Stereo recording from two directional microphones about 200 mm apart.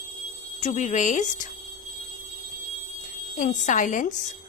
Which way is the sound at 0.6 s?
40° left (ahead or behind).